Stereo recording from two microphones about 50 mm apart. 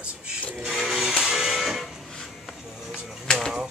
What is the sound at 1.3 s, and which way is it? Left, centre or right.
Printer, centre.